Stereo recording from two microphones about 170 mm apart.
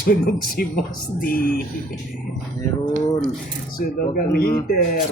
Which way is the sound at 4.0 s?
60° left (ahead or behind).